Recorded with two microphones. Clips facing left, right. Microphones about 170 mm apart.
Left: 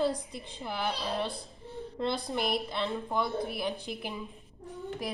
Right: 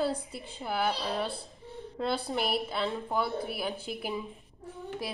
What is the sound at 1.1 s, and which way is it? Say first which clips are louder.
Speech: even; 20° left (ahead or behind).